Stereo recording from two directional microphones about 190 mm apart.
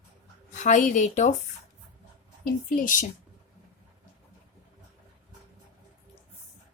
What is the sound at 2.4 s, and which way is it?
Speech, 45° left (ahead or behind).